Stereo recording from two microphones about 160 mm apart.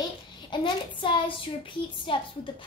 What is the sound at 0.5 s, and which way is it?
Child singing, 30° left (ahead or behind).